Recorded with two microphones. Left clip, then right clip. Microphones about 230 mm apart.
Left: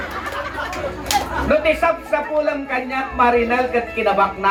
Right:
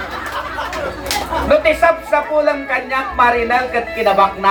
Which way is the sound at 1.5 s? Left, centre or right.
Right.